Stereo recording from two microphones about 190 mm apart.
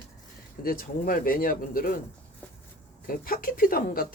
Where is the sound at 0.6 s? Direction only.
50° left (ahead or behind).